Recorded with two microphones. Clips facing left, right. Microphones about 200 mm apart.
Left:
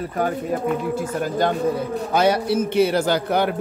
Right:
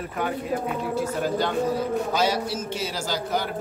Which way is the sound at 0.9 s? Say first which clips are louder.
Left 1 dB; 50° left (ahead or behind).